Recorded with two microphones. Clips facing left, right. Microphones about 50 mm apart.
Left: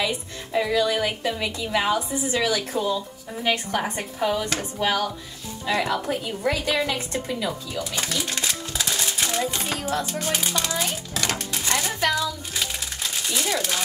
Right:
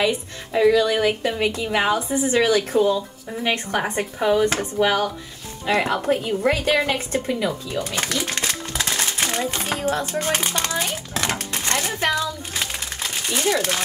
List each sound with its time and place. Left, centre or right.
0.5 s speech: centre
0.7 s speech: right
2.0 s a woman's voice: right
2.8 s speech: centre
3.4 s a woman's voice: right
7.8 s a sound: right
12.0 s crumpling: right